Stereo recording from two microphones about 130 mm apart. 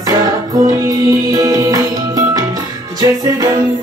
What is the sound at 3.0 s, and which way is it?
Music, 25° right (ahead or behind).